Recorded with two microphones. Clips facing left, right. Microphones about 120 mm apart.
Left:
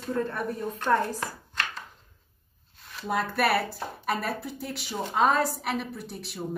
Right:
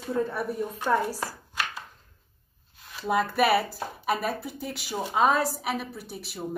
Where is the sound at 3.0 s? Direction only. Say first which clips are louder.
Right 3 dB; centre (ahead or behind).